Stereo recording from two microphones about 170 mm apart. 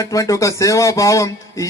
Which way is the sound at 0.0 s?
20° left (ahead or behind).